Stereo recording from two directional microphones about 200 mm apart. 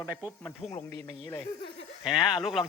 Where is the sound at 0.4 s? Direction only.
10° left (ahead or behind).